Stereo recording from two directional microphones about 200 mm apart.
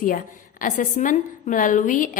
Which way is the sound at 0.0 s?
45° left (ahead or behind).